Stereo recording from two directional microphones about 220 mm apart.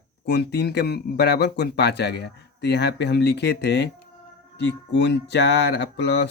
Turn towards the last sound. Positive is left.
turn(degrees=50)  # may be behind; listen again after turning